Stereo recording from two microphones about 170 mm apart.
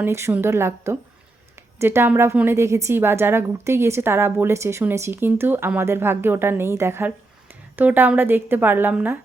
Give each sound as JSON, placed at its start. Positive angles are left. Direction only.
{"t": 0.0, "sound": "a woman's voice", "side_deg": -15}